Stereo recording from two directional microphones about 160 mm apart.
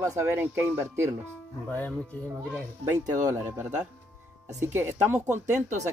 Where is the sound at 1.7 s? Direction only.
10° left (ahead or behind).